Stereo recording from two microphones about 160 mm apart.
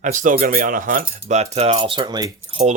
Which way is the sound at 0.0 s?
55° right (ahead or behind).